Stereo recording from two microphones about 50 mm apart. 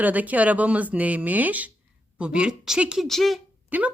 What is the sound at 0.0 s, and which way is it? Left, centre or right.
Speech, right.